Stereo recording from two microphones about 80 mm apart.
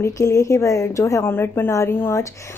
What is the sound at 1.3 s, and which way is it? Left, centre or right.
Speech, left.